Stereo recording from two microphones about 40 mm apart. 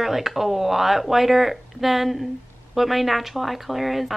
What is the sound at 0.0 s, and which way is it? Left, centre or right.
Speech, centre.